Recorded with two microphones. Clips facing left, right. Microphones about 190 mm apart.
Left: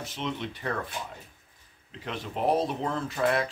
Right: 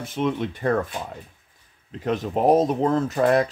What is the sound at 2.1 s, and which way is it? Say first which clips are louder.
Speech: right 8 dB; 45° right (ahead or behind).